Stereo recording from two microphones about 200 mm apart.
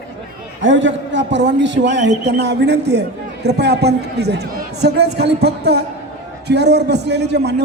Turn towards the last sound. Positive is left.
turn(degrees=-55)  # may be behind; listen again after turning